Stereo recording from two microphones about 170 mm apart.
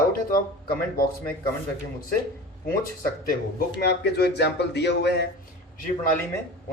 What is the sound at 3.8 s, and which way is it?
A man's voice, 75° left (ahead or behind).